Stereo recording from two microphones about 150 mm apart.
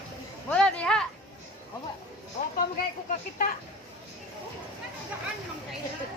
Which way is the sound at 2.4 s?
65° left (ahead or behind).